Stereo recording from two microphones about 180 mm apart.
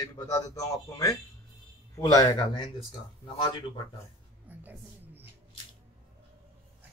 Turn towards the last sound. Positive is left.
turn(degrees=-10)  # may be behind; listen again after turning